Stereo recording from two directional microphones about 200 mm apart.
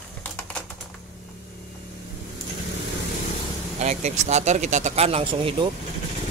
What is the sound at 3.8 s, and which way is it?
Speech, 35° right (ahead or behind).